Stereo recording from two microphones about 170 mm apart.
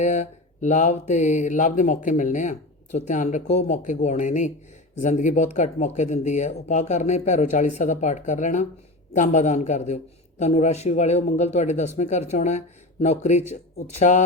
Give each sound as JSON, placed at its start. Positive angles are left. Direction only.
{"t": 0.0, "sound": "mantra", "side_deg": 45}
{"t": 11.3, "sound": "speech", "side_deg": 40}